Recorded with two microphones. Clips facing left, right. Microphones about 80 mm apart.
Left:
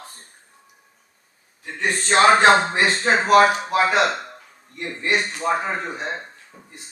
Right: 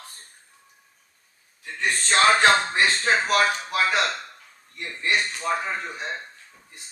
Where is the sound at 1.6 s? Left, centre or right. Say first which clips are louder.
Left 2 dB; left.